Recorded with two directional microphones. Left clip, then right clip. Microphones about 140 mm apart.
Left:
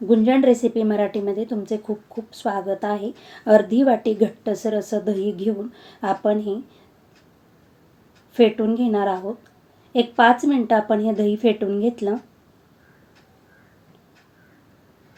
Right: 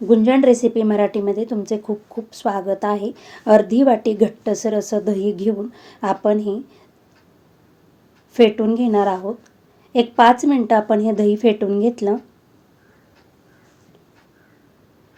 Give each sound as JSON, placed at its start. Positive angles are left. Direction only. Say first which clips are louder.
{"t": 0.1, "sound": "a woman's voice", "louder": "right 3 dB", "side_deg": -35}
{"t": 8.3, "sound": "a woman's voice", "louder": "right 3 dB", "side_deg": -35}